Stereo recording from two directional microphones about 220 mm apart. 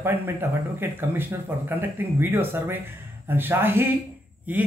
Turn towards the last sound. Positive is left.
turn(degrees=-5)  # may be behind; listen again after turning